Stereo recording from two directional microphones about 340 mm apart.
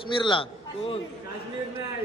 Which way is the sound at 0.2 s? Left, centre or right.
Centre.